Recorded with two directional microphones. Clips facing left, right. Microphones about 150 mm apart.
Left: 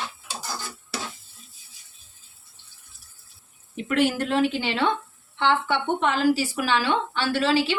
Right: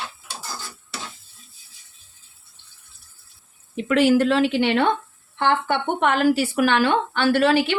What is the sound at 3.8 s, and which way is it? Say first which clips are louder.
A woman's voice: right 6 dB; 90° right.